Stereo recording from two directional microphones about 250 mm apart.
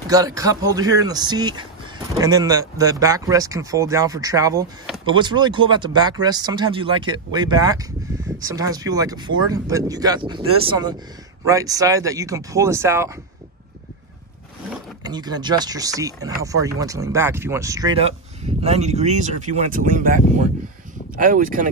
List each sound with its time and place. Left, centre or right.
0.1 s speech: centre
15.0 s speech: centre; by 21.6 s right